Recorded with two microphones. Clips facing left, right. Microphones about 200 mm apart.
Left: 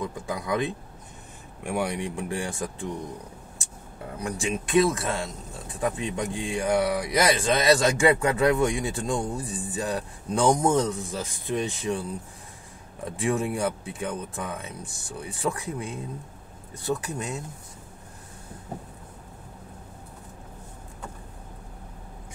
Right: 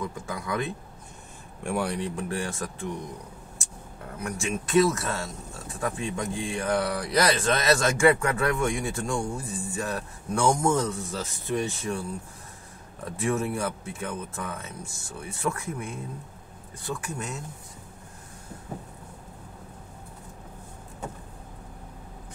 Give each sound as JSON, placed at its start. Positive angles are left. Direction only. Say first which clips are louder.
{"t": 0.0, "sound": "speech", "louder": "left 2 dB", "side_deg": 20}
{"t": 4.5, "sound": "speech", "louder": "even", "side_deg": 15}